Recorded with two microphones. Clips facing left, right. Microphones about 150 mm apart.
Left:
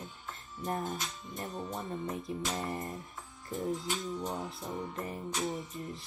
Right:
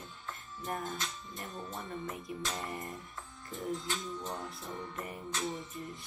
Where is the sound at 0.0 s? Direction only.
20° left (ahead or behind).